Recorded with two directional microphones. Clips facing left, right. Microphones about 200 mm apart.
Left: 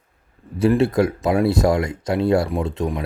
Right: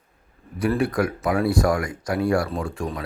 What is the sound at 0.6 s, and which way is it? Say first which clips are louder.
Speech: left 5 dB; 25° left (ahead or behind).